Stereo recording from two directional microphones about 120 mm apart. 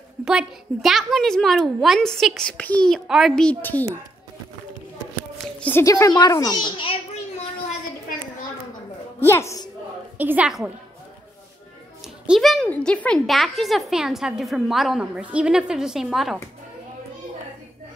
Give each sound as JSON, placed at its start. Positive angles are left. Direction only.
{"t": 0.2, "sound": "a woman's voice", "side_deg": -5}
{"t": 5.6, "sound": "a woman's voice", "side_deg": 15}
{"t": 5.9, "sound": "a child's voice", "side_deg": 30}
{"t": 9.2, "sound": "a woman's voice", "side_deg": 20}
{"t": 10.1, "sound": "a woman's voice", "side_deg": -15}
{"t": 12.3, "sound": "a woman's voice", "side_deg": 0}